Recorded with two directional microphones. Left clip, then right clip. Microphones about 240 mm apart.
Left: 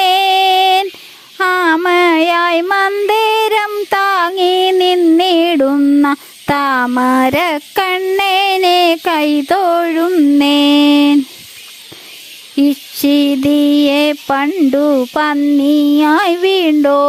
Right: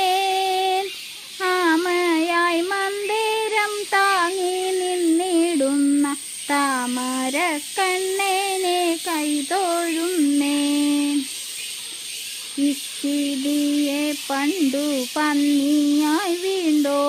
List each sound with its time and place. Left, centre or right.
0.0 s female singing: left
1.4 s child singing: left
13.0 s a sound: left
13.8 s sizzle: left
16.0 s speech: left